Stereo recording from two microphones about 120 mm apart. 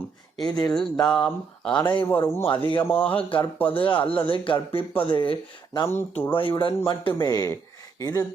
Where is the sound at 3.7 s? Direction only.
45° left (ahead or behind).